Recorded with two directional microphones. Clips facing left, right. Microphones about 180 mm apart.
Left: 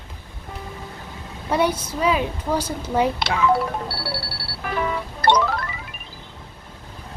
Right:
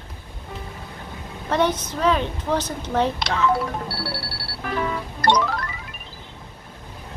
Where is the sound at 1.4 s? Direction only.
10° left (ahead or behind).